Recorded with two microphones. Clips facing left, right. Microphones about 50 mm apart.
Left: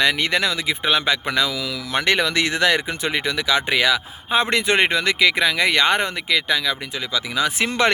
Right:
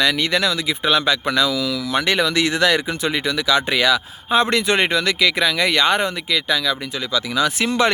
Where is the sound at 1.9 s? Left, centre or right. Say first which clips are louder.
Even; left.